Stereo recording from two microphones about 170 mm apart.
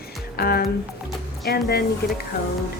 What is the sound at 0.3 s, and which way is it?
A woman's voice, 65° left (ahead or behind).